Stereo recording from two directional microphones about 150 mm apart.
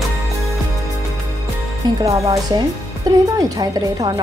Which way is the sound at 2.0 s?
20° right (ahead or behind).